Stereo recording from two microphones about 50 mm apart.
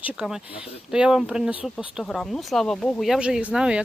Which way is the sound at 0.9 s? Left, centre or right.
Centre.